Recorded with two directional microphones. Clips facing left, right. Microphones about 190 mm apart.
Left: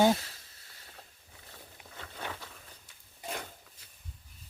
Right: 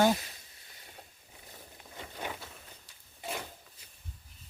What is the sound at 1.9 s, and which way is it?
Boat, 10° right (ahead or behind).